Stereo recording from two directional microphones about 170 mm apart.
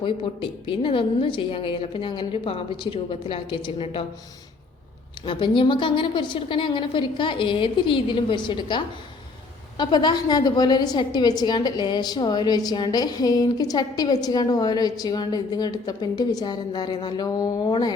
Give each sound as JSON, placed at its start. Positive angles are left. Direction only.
{"t": 0.0, "sound": "a woman's voice", "side_deg": 30}
{"t": 5.2, "sound": "a woman's voice", "side_deg": 30}